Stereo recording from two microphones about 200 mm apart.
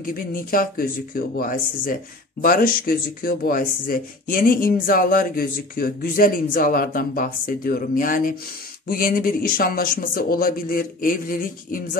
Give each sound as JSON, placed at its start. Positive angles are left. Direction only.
{"t": 0.0, "sound": "speech", "side_deg": 45}